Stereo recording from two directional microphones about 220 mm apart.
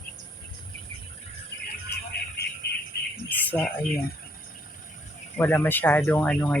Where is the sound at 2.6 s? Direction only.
45° left (ahead or behind).